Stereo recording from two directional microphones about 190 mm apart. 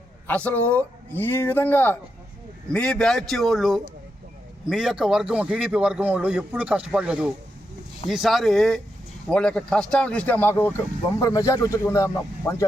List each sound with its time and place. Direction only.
0.3 s speech: 10° left (ahead or behind)